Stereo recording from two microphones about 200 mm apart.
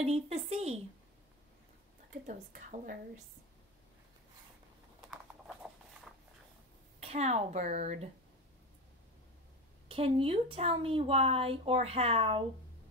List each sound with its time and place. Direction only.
0.0 s speech: 30° right (ahead or behind)
2.2 s speech: 40° right (ahead or behind)
5.1 s a sound: centre (ahead or behind)
7.0 s speech: 35° right (ahead or behind)
9.8 s speech: 25° right (ahead or behind)